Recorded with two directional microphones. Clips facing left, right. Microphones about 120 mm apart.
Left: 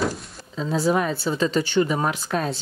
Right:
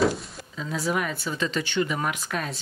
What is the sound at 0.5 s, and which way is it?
Speech, 30° left (ahead or behind).